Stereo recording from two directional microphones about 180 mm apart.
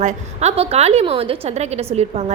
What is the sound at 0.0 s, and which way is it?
A woman's voice, 40° right (ahead or behind).